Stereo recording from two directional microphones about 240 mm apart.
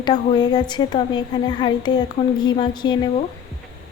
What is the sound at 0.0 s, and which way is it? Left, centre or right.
A woman's voice, centre.